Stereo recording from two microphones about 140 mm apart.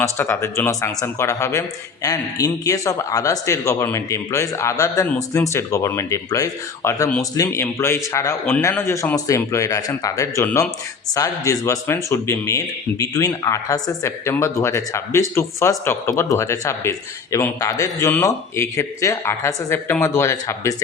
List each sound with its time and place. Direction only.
0.0 s speech: 20° left (ahead or behind)